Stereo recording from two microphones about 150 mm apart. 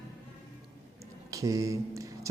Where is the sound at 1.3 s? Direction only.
20° right (ahead or behind).